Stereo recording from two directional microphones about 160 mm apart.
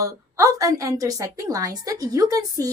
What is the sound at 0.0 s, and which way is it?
Speech, 20° right (ahead or behind).